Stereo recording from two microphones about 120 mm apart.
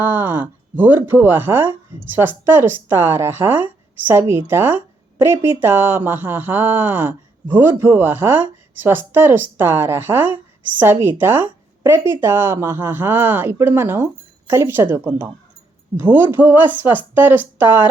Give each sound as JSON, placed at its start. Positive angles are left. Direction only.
{"t": 0.0, "sound": "speech", "side_deg": -15}